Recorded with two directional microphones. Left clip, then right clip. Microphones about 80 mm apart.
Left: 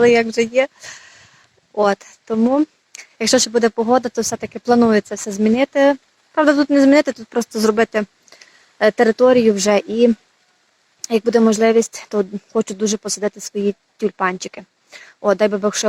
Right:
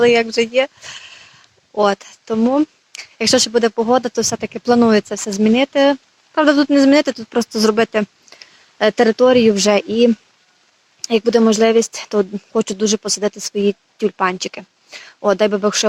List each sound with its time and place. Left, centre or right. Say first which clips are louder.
0.0 s speech: even; centre
9.8 s speech: right 1 dB; right
11.0 s speech: right 1 dB; centre